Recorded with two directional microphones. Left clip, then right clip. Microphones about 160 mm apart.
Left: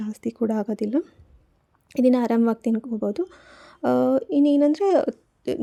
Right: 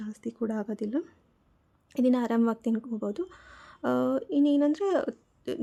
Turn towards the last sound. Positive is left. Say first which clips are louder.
# left 7 dB
turn(degrees=30)  # may be behind; listen again after turning